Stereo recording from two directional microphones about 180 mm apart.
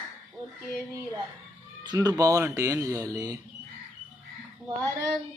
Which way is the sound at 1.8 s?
20° right (ahead or behind).